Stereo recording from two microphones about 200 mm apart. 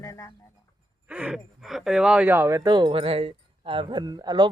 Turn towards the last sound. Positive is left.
turn(degrees=-20)  # may be behind; listen again after turning